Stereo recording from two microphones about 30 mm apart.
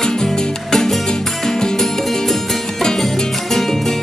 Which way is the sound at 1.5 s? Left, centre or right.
Left.